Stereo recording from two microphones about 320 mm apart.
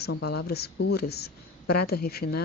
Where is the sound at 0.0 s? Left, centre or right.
Left.